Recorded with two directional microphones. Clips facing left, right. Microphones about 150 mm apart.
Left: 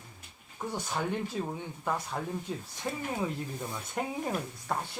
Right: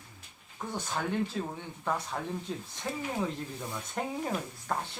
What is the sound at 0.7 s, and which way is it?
Speech, 15° left (ahead or behind).